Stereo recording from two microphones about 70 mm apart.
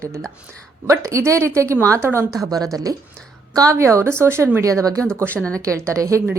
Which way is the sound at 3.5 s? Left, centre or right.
Right.